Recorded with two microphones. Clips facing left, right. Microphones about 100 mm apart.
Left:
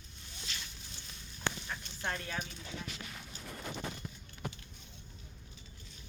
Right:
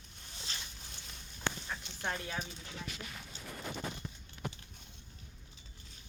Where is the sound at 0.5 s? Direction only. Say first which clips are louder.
Even; 35° right (ahead or behind).